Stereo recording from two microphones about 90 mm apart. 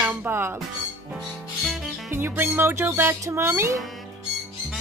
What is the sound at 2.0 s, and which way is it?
Speech, 25° right (ahead or behind).